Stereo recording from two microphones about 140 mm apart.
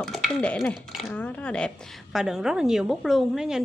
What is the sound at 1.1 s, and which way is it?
A woman's voice, 10° left (ahead or behind).